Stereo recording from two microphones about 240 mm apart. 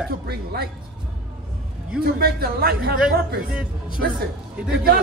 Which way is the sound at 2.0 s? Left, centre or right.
Right.